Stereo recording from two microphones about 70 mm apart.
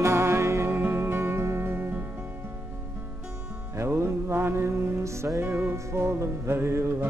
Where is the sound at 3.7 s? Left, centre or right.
Right.